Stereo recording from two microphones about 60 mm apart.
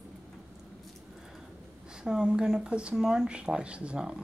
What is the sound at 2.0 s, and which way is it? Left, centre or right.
Speech, centre.